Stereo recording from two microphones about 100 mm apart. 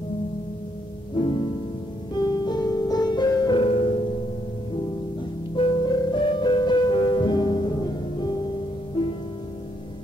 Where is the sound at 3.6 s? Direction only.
65° left (ahead or behind).